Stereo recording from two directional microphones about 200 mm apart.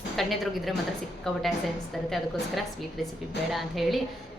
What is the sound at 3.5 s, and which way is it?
Speech, centre (ahead or behind).